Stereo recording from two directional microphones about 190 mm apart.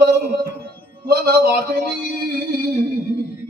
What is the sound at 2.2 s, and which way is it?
Music, 50° right (ahead or behind).